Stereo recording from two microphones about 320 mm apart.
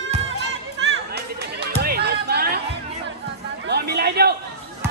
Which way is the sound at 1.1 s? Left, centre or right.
Right.